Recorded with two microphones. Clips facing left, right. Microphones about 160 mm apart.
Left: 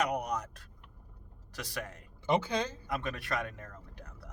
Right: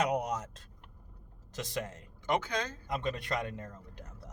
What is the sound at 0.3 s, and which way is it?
Speech, 25° right (ahead or behind).